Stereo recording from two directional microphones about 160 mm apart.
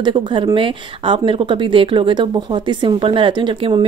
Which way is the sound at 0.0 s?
30° right (ahead or behind).